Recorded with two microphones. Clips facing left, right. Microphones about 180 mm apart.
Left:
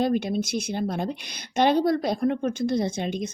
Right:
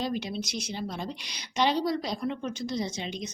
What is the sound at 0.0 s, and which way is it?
A woman's voice, 55° left (ahead or behind).